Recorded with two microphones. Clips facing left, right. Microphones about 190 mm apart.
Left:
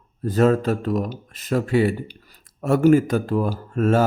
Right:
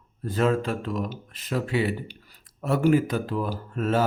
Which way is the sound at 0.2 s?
40° left (ahead or behind).